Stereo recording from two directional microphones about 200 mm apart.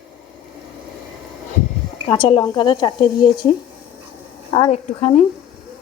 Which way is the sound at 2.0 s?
25° left (ahead or behind).